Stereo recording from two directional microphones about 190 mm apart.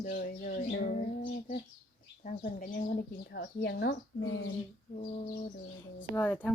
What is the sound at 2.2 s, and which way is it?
Speech, 45° left (ahead or behind).